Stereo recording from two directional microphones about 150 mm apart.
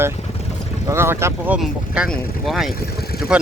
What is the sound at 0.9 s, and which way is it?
Speech, 15° right (ahead or behind).